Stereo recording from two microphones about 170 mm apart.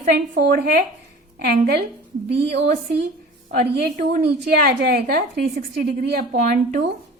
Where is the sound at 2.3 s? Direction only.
75° right (ahead or behind).